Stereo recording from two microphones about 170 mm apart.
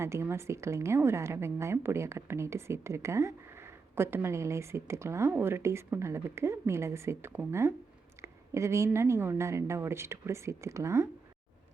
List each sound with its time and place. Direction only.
0.0 s a woman's voice: 15° right (ahead or behind)